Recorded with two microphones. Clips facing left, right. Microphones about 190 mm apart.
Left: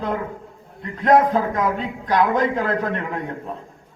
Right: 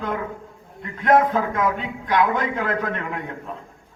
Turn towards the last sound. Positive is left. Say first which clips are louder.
# left 3 dB
turn(degrees=35)  # may be behind; listen again after turning